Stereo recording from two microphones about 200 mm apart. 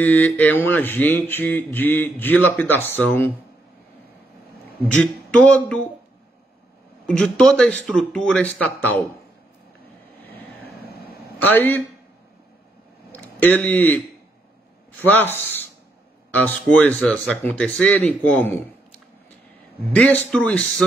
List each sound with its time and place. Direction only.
0.0 s speech: 10° left (ahead or behind)
4.9 s speech: 5° left (ahead or behind)
7.1 s speech: 5° left (ahead or behind)
10.9 s a sound: 50° left (ahead or behind)
11.3 s a man's voice: 10° left (ahead or behind)
13.1 s speech: 10° left (ahead or behind)